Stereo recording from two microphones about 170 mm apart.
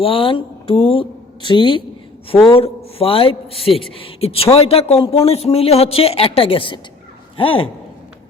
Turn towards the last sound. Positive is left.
turn(degrees=30)  # may be behind; listen again after turning